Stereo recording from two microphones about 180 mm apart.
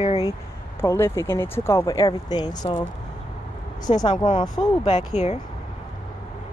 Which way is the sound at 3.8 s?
25° left (ahead or behind).